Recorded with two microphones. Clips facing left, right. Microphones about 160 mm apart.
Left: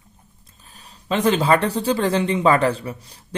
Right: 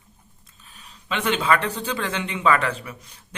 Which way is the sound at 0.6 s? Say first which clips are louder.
Left 2 dB; 35° left (ahead or behind).